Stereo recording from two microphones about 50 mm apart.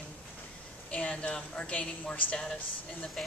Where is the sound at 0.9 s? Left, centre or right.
Left.